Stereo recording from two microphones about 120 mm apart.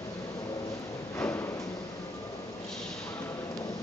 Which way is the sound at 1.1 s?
20° left (ahead or behind).